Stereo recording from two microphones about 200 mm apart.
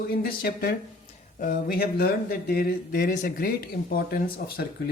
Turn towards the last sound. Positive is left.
turn(degrees=50)  # may be behind; listen again after turning